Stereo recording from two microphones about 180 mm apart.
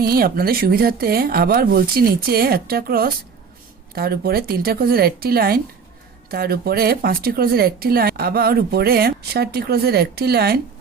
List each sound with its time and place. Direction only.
0.0 s speech: 55° right (ahead or behind)